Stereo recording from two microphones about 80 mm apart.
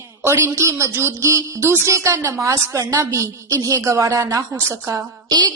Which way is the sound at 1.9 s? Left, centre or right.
Right.